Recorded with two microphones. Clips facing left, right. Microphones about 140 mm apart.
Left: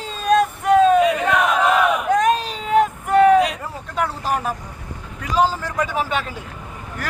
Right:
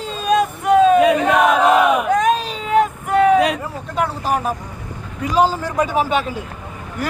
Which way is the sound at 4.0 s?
15° right (ahead or behind).